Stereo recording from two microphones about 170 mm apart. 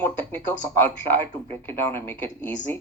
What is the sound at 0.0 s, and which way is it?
Speech, 10° left (ahead or behind).